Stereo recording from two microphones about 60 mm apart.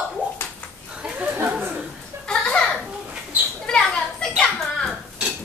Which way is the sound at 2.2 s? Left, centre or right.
Centre.